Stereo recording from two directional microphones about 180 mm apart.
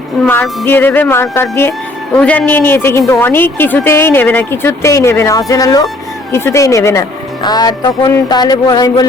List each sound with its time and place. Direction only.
0.6 s a woman's voice: 10° left (ahead or behind)